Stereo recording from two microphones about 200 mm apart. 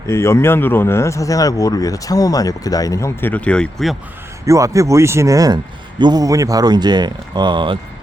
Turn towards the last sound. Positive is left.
turn(degrees=-25)  # may be behind; listen again after turning